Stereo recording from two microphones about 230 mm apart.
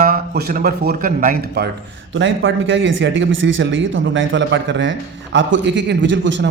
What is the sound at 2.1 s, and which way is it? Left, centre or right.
A man's voice, right.